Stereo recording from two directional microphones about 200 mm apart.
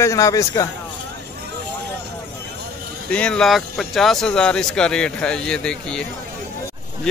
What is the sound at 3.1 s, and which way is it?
Speech, 5° left (ahead or behind).